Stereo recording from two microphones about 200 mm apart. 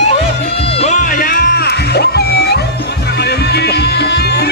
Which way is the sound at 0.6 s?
30° left (ahead or behind).